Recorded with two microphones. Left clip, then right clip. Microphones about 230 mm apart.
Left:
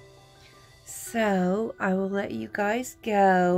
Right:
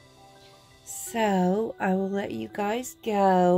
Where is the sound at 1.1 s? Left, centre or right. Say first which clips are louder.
Right 1 dB; centre.